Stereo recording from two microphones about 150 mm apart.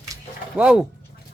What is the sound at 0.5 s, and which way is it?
Speech, 5° right (ahead or behind).